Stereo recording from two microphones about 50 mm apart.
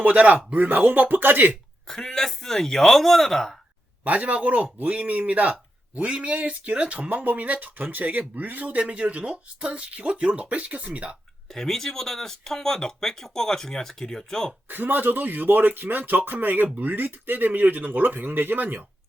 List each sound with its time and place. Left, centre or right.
0.0 s speech: right
1.9 s speech: centre
4.0 s speech: right
8.8 s speech: centre
11.4 s speech: centre
14.7 s speech: right